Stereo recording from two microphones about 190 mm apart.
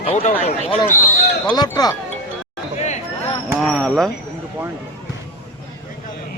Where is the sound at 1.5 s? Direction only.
20° left (ahead or behind).